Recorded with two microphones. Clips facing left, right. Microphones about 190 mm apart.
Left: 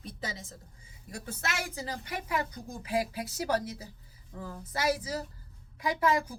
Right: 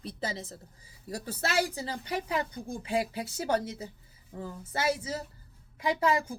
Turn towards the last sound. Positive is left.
turn(degrees=-25)  # may be behind; listen again after turning